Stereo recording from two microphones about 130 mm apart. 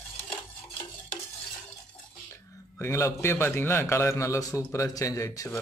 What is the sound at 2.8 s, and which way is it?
A man's voice, 20° left (ahead or behind).